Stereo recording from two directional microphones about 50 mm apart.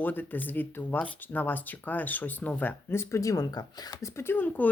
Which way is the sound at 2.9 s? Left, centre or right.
Left.